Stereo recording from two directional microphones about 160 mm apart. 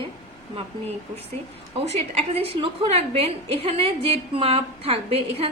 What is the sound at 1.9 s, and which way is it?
A woman's voice, 35° right (ahead or behind).